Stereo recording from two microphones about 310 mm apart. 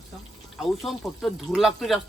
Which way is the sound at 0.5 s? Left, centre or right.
Centre.